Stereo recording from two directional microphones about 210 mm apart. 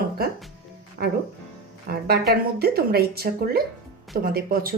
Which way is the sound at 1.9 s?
45° right (ahead or behind).